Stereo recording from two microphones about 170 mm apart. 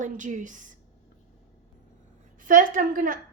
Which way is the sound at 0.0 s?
50° right (ahead or behind).